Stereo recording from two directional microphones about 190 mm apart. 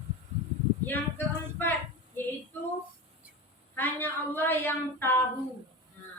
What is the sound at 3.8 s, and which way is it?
Speech, 10° left (ahead or behind).